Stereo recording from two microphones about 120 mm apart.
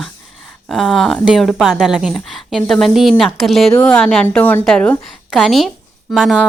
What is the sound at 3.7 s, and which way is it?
A woman's voice, 10° left (ahead or behind).